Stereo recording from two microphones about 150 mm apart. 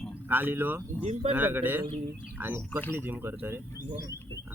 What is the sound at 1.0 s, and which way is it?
Speech, 45° right (ahead or behind).